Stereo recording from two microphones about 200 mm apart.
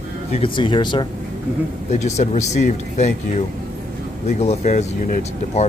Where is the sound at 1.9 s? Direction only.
35° left (ahead or behind).